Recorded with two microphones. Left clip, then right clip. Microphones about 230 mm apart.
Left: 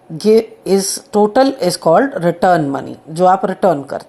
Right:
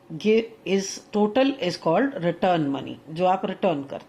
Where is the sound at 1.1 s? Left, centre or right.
Left.